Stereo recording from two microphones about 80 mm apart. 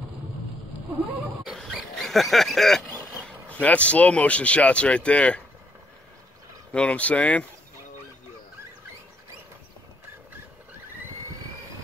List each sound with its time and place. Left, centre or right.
1.5 s dog: centre
3.3 s speech: centre
6.7 s speech: centre